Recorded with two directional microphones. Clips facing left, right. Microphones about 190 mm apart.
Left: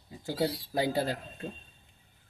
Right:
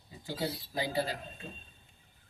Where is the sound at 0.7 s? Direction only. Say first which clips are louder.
Left 4 dB; 55° left (ahead or behind).